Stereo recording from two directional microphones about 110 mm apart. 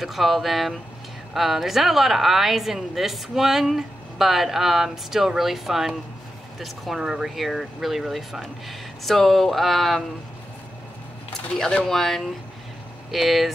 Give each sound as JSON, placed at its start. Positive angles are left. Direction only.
{"t": 0.0, "sound": "speech", "side_deg": 0}
{"t": 11.5, "sound": "speech", "side_deg": 5}